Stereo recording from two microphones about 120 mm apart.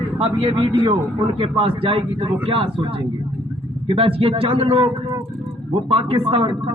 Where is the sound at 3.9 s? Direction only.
50° right (ahead or behind).